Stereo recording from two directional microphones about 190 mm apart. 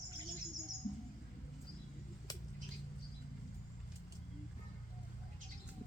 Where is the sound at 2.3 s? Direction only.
20° left (ahead or behind).